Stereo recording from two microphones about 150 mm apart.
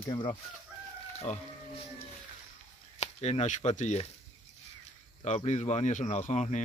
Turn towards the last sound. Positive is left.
turn(degrees=50)  # may be behind; listen again after turning